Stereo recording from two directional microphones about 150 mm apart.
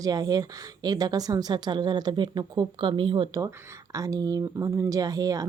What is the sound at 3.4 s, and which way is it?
Speech, 20° right (ahead or behind).